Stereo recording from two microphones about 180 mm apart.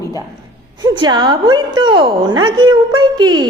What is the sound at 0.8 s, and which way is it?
A woman's voice, 25° right (ahead or behind).